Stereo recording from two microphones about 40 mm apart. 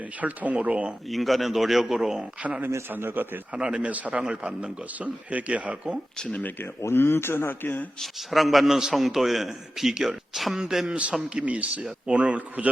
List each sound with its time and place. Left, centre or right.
0.2 s speech: right
1.1 s a man's voice: centre
3.2 s speech: right
3.5 s speech: right
3.8 s speech: right
4.2 s speech: right
5.3 s speech: right
6.9 s speech: left
8.3 s a man's voice: centre
10.8 s speech: right